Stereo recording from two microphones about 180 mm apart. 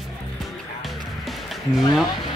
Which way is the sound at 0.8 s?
Centre (ahead or behind).